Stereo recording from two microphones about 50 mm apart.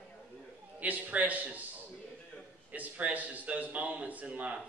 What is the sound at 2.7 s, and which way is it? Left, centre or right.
A man's voice, right.